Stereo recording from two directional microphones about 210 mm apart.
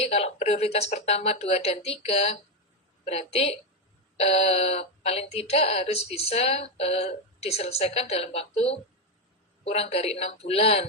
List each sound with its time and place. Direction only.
0.0 s speech: 30° left (ahead or behind)